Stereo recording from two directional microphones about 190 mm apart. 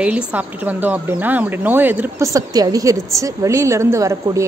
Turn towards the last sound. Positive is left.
turn(degrees=-15)  # may be behind; listen again after turning